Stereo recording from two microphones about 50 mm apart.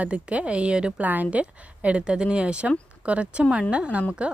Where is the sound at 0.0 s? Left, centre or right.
Right.